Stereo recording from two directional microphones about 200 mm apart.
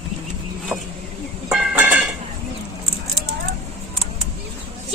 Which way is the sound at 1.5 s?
5° right (ahead or behind).